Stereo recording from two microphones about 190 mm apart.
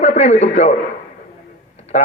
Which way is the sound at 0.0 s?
40° left (ahead or behind).